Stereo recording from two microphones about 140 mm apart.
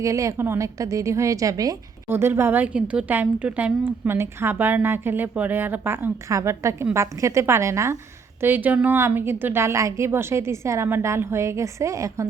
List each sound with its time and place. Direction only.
0.0 s a woman's voice: 20° right (ahead or behind)